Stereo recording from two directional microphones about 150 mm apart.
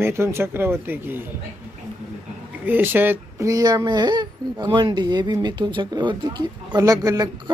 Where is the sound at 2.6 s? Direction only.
15° right (ahead or behind).